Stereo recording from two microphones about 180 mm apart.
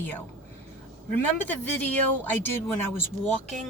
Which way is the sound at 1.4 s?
10° left (ahead or behind).